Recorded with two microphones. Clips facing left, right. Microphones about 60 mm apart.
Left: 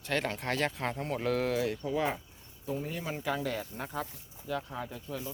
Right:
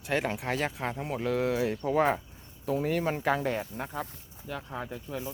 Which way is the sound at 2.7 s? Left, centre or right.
Right.